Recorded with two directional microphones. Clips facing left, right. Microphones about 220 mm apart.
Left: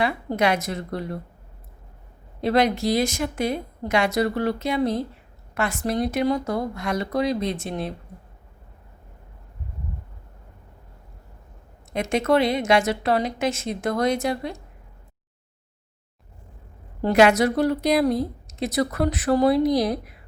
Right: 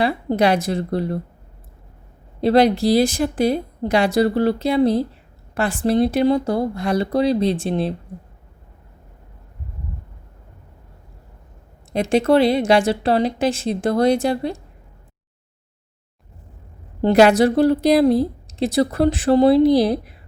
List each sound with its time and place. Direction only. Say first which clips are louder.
0.0 s a woman's voice: right 5 dB; 35° right (ahead or behind)
2.4 s a woman's voice: right 6 dB; 35° right (ahead or behind)
11.9 s a woman's voice: right 5 dB; 30° right (ahead or behind)
17.0 s a woman's voice: right 4 dB; 35° right (ahead or behind)